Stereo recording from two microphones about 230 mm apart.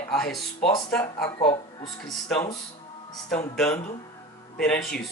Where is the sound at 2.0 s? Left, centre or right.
Centre.